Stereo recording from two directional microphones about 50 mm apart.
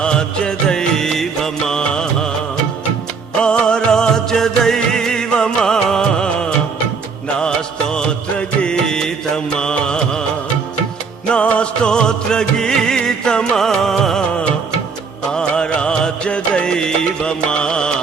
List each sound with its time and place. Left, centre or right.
0.0 s music: centre
3.6 s music: centre
11.3 s music: left
15.3 s music: centre